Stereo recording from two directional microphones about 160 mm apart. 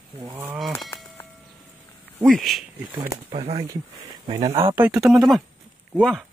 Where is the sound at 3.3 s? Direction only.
35° right (ahead or behind).